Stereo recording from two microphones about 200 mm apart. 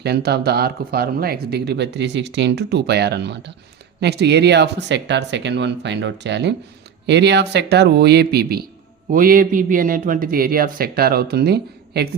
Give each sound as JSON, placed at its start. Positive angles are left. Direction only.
{"t": 0.0, "sound": "a man's voice", "side_deg": -55}